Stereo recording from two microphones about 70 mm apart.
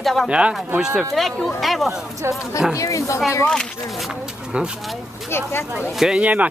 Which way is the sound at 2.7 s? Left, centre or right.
Left.